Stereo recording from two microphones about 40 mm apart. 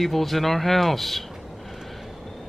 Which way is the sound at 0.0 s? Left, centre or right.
Centre.